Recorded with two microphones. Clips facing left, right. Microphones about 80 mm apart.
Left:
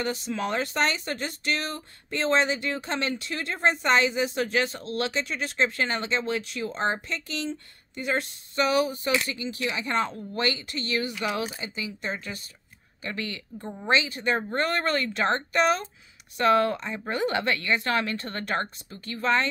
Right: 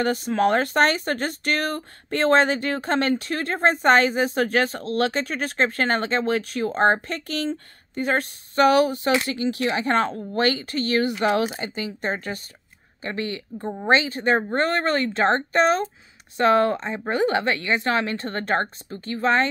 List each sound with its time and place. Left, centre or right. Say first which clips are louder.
0.0 s speech: right 8 dB; right
9.2 s speech: right 7 dB; right
13.0 s speech: right 5 dB; right